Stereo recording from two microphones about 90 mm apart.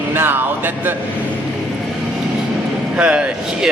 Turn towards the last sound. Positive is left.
turn(degrees=-10)  # may be behind; listen again after turning